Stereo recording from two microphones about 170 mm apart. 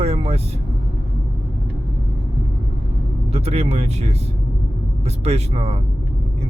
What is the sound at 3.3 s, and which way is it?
Speech, 35° right (ahead or behind).